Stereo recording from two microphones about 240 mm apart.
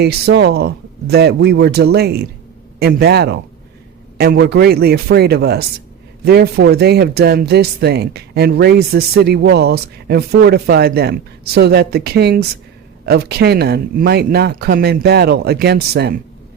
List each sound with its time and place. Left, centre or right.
0.0 s speech: right